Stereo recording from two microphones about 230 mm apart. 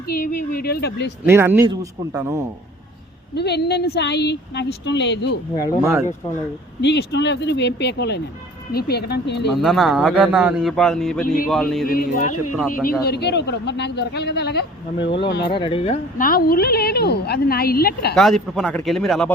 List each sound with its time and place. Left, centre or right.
0.1 s a woman's voice: left
1.2 s speech: centre
3.3 s a man's voice: left
5.8 s speech: centre
6.8 s a man's voice: left
9.5 s a man's voice: centre
11.9 s a woman's voice: left
15.5 s a woman's voice: left
18.1 s a man's voice: centre